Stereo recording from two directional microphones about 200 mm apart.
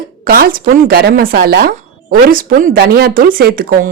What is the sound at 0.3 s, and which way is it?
A woman's voice, 45° right (ahead or behind).